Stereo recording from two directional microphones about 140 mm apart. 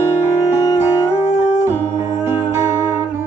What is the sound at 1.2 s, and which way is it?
Music, 15° right (ahead or behind).